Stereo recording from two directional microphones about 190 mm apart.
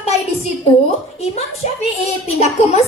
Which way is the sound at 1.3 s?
35° left (ahead or behind).